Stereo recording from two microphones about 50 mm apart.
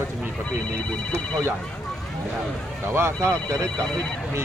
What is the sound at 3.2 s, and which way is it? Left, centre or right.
Speech, right.